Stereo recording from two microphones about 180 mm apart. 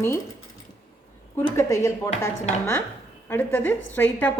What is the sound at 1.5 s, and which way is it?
A woman's voice, 15° left (ahead or behind).